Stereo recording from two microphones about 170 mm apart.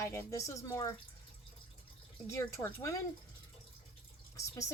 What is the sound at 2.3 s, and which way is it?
Speech, 15° left (ahead or behind).